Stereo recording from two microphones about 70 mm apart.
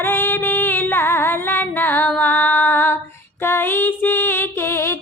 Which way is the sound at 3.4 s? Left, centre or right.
Left.